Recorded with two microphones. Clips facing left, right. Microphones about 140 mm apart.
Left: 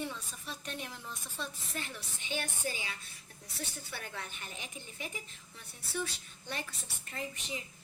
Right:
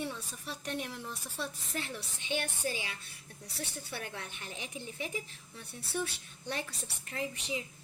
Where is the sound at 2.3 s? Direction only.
65° right (ahead or behind).